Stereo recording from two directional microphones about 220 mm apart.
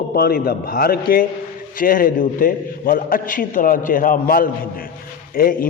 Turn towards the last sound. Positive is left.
turn(degrees=40)  # may be behind; listen again after turning